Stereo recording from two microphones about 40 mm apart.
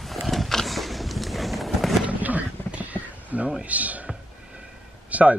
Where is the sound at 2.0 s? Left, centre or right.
Right.